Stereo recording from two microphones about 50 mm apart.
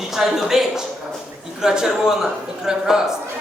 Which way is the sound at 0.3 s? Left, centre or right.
Centre.